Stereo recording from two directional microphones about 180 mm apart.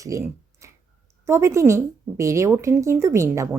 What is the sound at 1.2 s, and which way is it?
A woman's voice, 15° right (ahead or behind).